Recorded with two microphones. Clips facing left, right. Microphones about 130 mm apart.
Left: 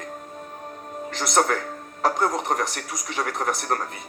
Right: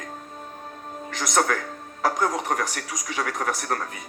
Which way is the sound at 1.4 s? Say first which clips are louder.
Left 1 dB; 30° left (ahead or behind).